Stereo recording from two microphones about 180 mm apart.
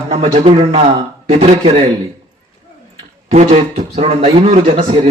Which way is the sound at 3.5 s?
35° right (ahead or behind).